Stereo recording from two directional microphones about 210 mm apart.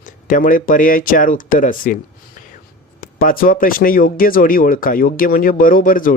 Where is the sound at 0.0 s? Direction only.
40° left (ahead or behind).